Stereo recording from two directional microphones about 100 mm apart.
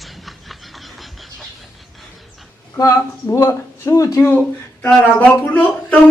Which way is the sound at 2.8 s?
30° left (ahead or behind).